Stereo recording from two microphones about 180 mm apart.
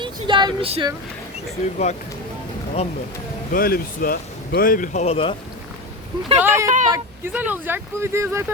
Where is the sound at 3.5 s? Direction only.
55° left (ahead or behind); by 5.3 s 35° left (ahead or behind).